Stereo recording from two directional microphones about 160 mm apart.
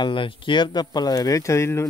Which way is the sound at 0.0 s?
30° left (ahead or behind).